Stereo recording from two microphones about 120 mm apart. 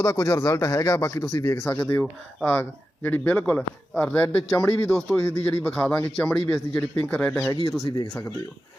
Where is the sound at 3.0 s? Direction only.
15° left (ahead or behind).